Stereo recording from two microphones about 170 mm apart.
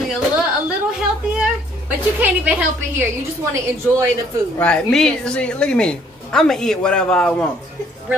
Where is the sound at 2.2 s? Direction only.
10° right (ahead or behind).